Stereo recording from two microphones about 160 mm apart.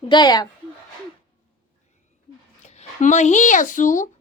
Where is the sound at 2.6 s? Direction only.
45° left (ahead or behind).